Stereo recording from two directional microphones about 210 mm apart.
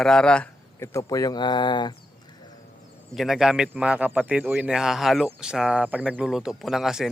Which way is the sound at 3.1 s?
Centre (ahead or behind).